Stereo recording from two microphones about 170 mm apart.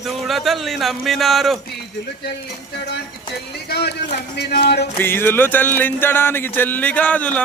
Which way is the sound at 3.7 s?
75° left (ahead or behind).